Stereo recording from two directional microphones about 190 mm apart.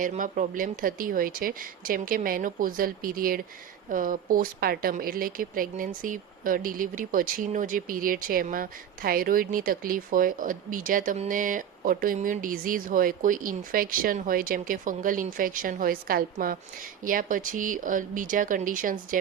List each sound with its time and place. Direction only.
0.0 s a woman's voice: 45° right (ahead or behind)